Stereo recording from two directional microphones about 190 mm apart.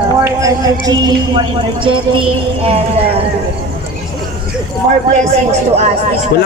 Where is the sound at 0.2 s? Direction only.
15° right (ahead or behind).